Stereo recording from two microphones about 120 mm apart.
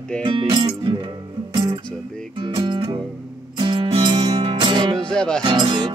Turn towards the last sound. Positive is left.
turn(degrees=-40)  # may be behind; listen again after turning